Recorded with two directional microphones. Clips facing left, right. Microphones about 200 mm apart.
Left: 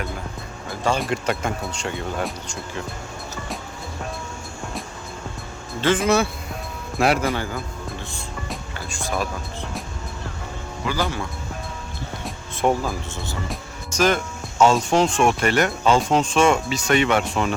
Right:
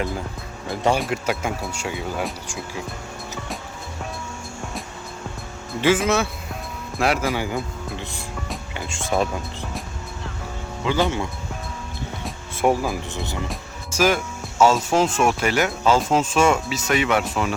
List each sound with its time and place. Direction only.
0.9 s speech: 5° right (ahead or behind)
5.8 s speech: 5° right (ahead or behind)
7.3 s a man's voice: 15° right (ahead or behind)
8.7 s speech: 20° right (ahead or behind)
10.8 s speech: 25° right (ahead or behind)
12.2 s speech: 10° right (ahead or behind)
14.6 s speech: 5° right (ahead or behind)